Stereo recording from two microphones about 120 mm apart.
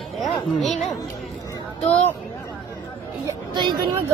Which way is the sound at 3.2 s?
40° right (ahead or behind).